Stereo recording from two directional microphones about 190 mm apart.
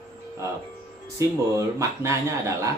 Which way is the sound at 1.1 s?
15° right (ahead or behind).